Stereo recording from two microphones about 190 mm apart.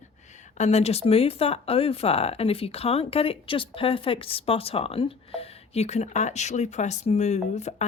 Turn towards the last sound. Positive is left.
turn(degrees=35)  # may be behind; listen again after turning